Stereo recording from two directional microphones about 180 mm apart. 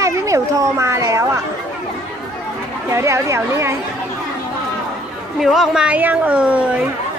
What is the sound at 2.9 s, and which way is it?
Speech, 15° right (ahead or behind).